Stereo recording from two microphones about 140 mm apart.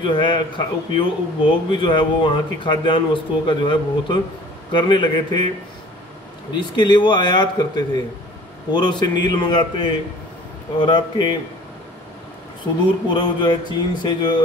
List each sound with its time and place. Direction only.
0.0 s a man's voice: 35° left (ahead or behind)
6.5 s a man's voice: 35° left (ahead or behind)
13.1 s a man's voice: 30° left (ahead or behind)